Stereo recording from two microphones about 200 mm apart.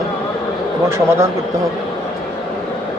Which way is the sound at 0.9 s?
15° right (ahead or behind).